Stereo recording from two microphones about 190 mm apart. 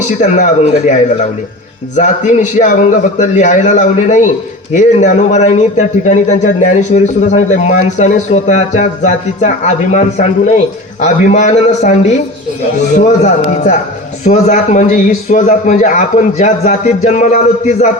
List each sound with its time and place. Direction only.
0.2 s a man's voice: 40° left (ahead or behind)